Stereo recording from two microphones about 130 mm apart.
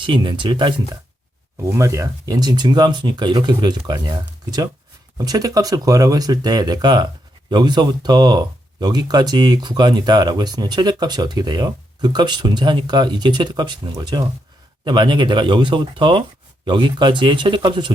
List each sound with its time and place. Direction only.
0.0 s speech: 40° right (ahead or behind)
1.7 s speech: 25° right (ahead or behind)
5.1 s speech: 30° right (ahead or behind)